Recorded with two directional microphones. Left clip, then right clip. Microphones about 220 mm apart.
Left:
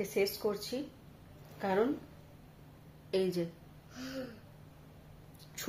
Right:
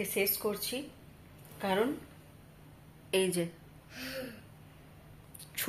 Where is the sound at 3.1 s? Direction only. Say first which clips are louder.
Right 2 dB; 10° right (ahead or behind).